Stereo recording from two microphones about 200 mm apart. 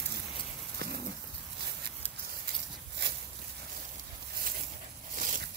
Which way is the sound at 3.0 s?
60° right (ahead or behind).